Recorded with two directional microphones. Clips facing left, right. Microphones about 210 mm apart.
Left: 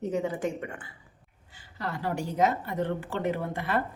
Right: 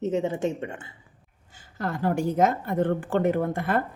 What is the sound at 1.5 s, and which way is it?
A woman's voice, 45° right (ahead or behind).